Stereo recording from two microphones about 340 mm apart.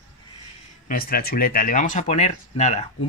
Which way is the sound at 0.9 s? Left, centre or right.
Left.